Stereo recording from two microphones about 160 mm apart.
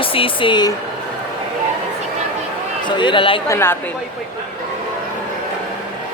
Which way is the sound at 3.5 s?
15° left (ahead or behind).